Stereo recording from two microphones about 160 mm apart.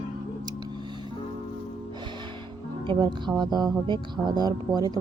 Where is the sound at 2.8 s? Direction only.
30° right (ahead or behind).